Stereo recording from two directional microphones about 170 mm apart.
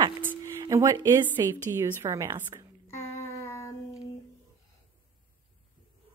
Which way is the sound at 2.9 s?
15° left (ahead or behind).